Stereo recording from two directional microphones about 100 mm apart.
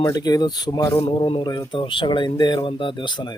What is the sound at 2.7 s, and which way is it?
Speech, 55° left (ahead or behind).